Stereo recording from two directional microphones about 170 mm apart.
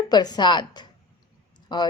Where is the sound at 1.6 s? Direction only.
25° left (ahead or behind).